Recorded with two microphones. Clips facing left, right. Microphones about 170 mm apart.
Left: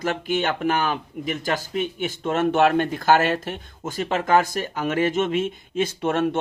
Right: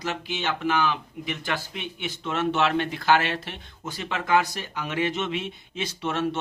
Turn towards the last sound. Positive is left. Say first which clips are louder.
# left 5 dB
turn(degrees=50)  # may be behind; listen again after turning